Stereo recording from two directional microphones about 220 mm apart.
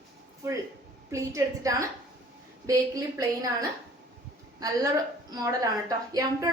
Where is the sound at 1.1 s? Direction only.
15° right (ahead or behind).